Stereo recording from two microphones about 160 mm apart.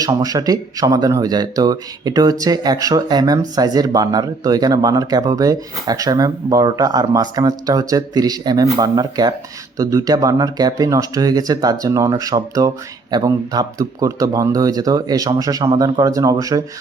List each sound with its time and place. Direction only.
0.0 s speech: 25° right (ahead or behind)